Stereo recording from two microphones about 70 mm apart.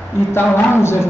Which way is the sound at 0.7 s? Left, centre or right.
Left.